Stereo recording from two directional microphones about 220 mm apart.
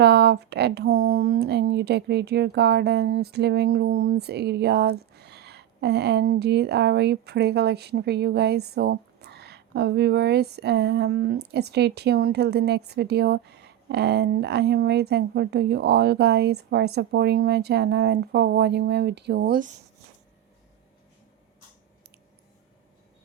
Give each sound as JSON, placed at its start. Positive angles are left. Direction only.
{"t": 0.0, "sound": "speech", "side_deg": -50}